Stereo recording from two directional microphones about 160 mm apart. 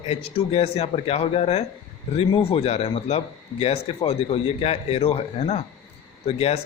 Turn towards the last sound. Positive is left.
turn(degrees=40)  # may be behind; listen again after turning